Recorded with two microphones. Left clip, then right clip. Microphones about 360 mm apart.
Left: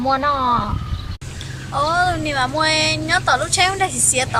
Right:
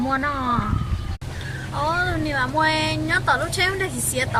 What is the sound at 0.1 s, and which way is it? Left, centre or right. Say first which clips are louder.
Speech: left 8 dB; centre.